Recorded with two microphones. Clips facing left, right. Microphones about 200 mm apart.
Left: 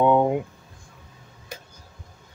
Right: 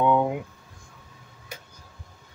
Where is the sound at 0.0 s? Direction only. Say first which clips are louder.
Left 3 dB; 30° left (ahead or behind).